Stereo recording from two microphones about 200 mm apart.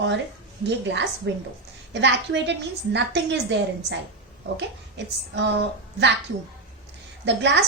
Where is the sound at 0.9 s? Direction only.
65° right (ahead or behind).